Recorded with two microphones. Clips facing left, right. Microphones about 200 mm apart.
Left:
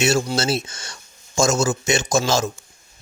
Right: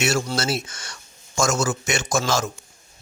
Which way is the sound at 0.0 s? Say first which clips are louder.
Left 3 dB; 25° left (ahead or behind).